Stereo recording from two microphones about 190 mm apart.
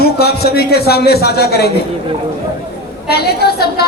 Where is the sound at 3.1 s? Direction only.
55° left (ahead or behind).